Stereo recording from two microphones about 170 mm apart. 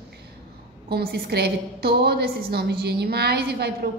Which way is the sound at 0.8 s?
70° right (ahead or behind).